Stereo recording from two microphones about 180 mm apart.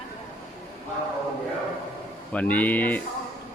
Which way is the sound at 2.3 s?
10° left (ahead or behind).